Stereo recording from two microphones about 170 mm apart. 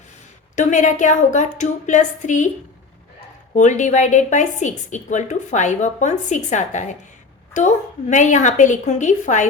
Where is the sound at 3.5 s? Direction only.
45° left (ahead or behind).